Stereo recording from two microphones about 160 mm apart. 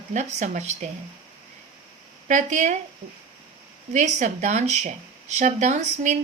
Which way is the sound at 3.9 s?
45° right (ahead or behind).